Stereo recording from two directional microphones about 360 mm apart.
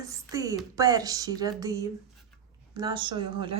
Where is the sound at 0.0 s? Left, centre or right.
Centre.